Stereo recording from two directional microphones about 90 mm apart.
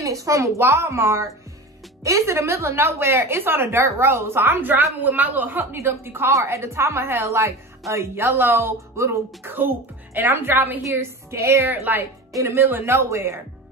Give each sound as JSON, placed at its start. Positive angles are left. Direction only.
{"t": 0.0, "sound": "a woman's voice", "side_deg": -40}